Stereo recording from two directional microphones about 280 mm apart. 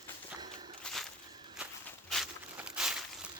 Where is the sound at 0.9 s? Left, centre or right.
Centre.